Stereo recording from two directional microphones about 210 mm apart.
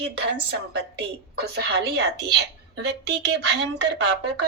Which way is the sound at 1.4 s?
50° right (ahead or behind).